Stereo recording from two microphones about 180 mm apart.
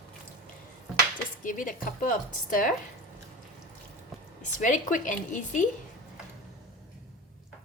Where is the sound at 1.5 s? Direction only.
50° left (ahead or behind).